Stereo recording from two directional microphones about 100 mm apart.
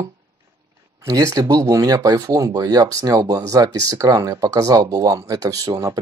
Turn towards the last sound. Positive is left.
turn(degrees=-35)  # may be behind; listen again after turning